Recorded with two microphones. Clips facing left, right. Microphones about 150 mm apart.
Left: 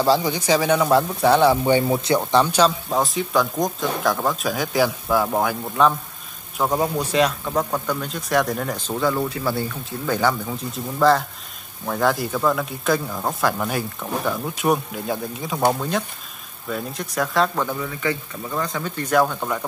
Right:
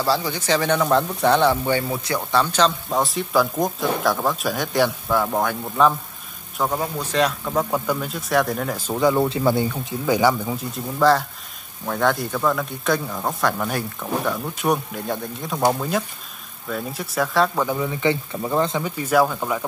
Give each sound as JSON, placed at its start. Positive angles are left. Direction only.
{"t": 0.0, "sound": "speech", "side_deg": 15}
{"t": 6.6, "sound": "a man's voice", "side_deg": 15}
{"t": 7.2, "sound": "speech", "side_deg": 0}
{"t": 8.8, "sound": "speech", "side_deg": -15}
{"t": 10.6, "sound": "speech", "side_deg": 0}
{"t": 18.8, "sound": "speech", "side_deg": -10}